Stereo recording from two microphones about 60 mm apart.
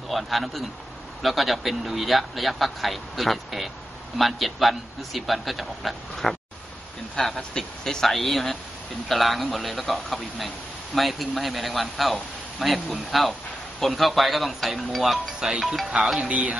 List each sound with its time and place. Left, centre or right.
0.1 s speech: centre
7.3 s speech: centre
16.2 s speech: right